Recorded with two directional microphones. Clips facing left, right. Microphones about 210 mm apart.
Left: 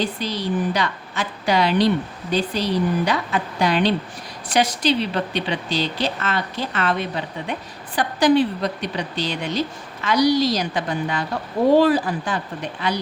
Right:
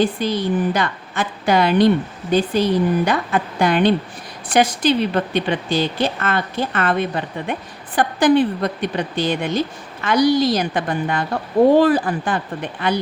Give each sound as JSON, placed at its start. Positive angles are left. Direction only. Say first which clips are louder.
{"t": 0.0, "sound": "a woman's voice", "louder": "right 6 dB", "side_deg": -50}